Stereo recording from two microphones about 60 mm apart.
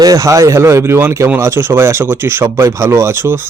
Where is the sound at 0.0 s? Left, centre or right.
Right.